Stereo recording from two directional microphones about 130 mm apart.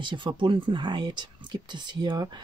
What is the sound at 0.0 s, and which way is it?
Speech, 40° right (ahead or behind).